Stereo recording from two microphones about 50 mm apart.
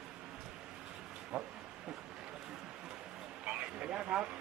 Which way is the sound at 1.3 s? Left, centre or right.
Right.